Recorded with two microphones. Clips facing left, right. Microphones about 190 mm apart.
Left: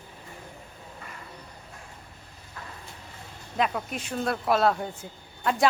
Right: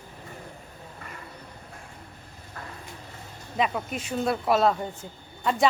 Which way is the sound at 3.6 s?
Centre (ahead or behind).